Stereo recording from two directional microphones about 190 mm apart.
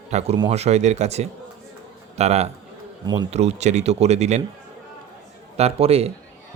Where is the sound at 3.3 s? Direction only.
35° right (ahead or behind).